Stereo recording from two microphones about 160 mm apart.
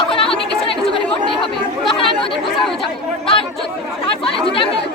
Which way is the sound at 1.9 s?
35° left (ahead or behind).